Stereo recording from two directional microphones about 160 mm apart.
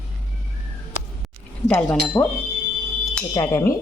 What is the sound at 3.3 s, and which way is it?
Speech, 15° left (ahead or behind).